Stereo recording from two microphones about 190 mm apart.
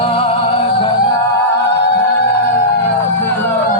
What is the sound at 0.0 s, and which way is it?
Music, 30° left (ahead or behind).